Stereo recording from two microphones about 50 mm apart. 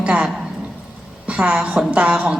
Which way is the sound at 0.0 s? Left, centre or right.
Centre.